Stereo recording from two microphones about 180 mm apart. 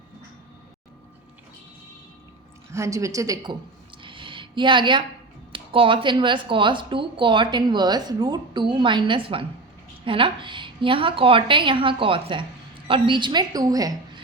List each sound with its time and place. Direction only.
2.7 s speech: 15° right (ahead or behind)